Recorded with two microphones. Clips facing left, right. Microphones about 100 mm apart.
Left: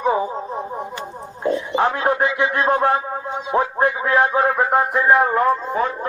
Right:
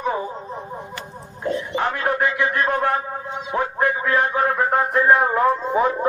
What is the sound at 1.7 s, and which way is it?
Music, 25° left (ahead or behind).